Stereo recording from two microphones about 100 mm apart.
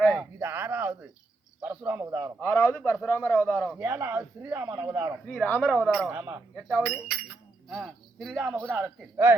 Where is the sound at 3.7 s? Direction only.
25° right (ahead or behind).